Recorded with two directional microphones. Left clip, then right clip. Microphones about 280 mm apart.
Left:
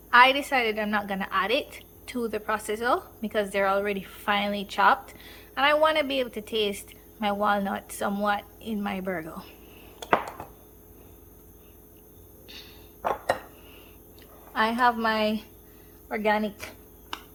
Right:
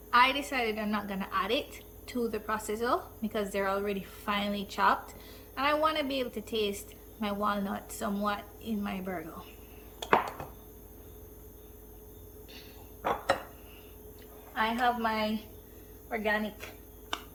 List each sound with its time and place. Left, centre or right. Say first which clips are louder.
0.1 s a woman's voice: left 7 dB; centre
12.5 s a sound: left 8 dB; left
14.5 s a woman's voice: left 6 dB; centre